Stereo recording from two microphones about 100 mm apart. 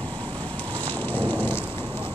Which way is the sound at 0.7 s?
15° left (ahead or behind).